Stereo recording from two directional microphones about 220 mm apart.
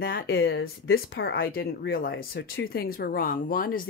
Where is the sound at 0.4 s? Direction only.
55° left (ahead or behind).